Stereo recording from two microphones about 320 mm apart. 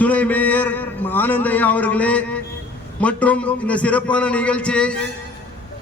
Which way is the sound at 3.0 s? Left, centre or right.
Centre.